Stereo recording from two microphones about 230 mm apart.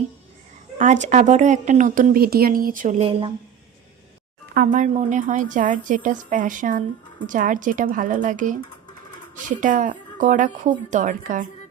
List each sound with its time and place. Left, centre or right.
0.8 s speech: right
4.5 s speech: right
9.6 s speech: right